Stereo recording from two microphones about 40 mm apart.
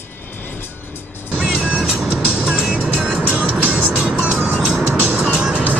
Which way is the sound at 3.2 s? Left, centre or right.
Right.